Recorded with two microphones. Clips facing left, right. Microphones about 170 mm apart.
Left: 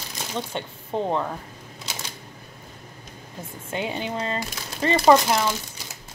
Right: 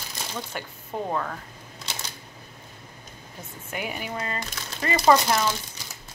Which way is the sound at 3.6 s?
25° left (ahead or behind).